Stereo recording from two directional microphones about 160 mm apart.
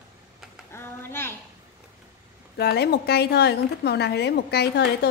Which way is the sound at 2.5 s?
90° left.